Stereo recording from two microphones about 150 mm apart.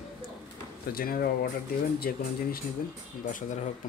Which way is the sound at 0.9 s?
75° left (ahead or behind).